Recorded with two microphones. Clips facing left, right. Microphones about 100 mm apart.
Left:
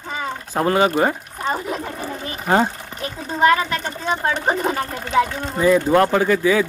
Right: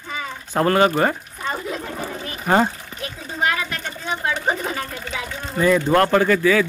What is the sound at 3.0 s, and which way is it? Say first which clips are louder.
Speech: left 6 dB; 35° left (ahead or behind).